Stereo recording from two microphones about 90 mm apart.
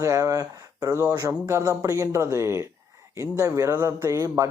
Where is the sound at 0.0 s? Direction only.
35° right (ahead or behind).